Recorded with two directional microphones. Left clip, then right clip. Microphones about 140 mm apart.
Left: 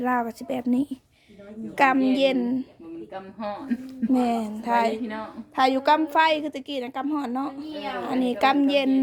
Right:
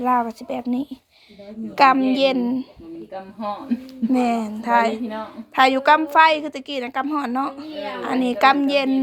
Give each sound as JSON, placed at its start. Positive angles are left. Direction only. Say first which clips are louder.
{"t": 0.0, "sound": "speech", "louder": "right 5 dB", "side_deg": 25}
{"t": 1.7, "sound": "a woman's voice", "louder": "right 5 dB", "side_deg": 15}
{"t": 4.1, "sound": "a woman's voice", "louder": "right 3 dB", "side_deg": 20}